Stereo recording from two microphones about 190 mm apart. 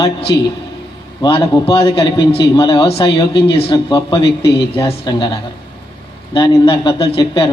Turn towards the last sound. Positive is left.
turn(degrees=25)  # may be behind; listen again after turning